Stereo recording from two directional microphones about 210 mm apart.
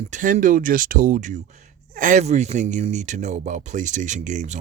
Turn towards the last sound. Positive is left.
turn(degrees=-35)  # may be behind; listen again after turning